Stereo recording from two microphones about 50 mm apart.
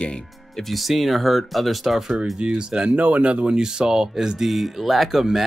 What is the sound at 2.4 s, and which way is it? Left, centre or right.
Speech, centre.